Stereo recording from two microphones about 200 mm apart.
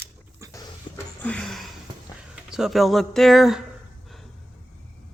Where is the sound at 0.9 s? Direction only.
25° left (ahead or behind).